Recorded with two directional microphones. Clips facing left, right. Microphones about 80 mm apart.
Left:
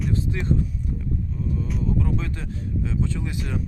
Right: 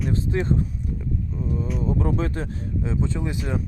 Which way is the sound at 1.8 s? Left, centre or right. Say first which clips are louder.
Right 2 dB; right.